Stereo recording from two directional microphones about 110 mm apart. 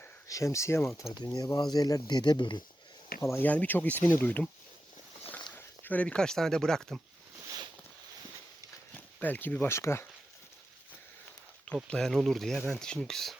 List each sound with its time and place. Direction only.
0.3 s speech: 30° left (ahead or behind)
1.1 s speech: 40° left (ahead or behind)
3.2 s speech: 25° left (ahead or behind)
3.4 s speech: 15° left (ahead or behind)
5.5 s speech: 15° left (ahead or behind)
9.0 s speech: 15° left (ahead or behind)
11.9 s speech: 5° left (ahead or behind)